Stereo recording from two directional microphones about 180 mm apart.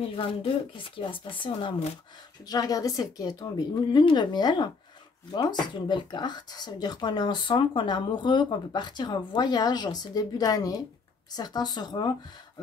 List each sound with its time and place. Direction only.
0.0 s speech: 30° left (ahead or behind)
2.4 s speech: 20° left (ahead or behind)